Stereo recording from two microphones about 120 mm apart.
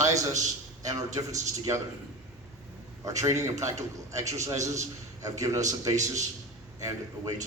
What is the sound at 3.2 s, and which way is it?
A man's voice, 25° right (ahead or behind).